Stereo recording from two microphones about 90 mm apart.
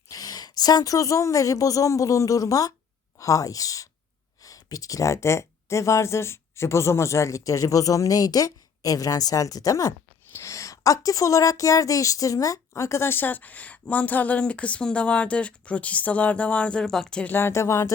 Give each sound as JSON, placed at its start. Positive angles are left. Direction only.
{"t": 0.1, "sound": "a woman's voice", "side_deg": 45}
{"t": 17.3, "sound": "speech", "side_deg": 30}